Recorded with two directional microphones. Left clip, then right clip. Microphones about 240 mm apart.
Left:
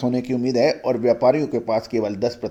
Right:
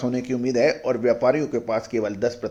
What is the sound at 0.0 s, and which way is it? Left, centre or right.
Speech, left.